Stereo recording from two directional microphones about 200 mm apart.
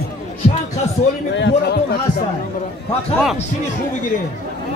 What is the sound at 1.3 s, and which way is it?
Speech, 60° left (ahead or behind).